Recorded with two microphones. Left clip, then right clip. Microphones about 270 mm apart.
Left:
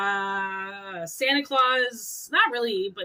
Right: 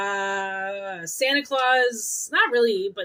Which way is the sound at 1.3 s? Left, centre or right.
Left.